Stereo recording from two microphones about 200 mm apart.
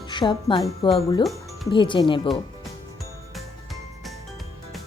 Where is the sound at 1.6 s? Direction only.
25° left (ahead or behind).